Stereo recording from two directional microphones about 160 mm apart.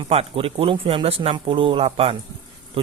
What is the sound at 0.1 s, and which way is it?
Speech, 35° right (ahead or behind).